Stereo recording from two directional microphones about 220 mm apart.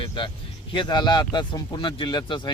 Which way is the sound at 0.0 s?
20° left (ahead or behind).